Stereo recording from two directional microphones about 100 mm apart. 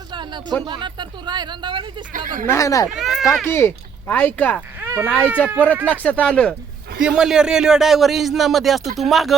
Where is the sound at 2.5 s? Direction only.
35° left (ahead or behind).